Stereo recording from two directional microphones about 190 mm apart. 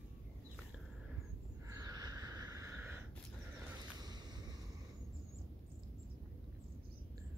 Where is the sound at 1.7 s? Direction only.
20° right (ahead or behind).